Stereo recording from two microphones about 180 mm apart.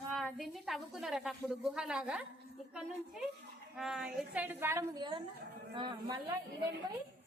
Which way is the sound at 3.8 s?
5° right (ahead or behind).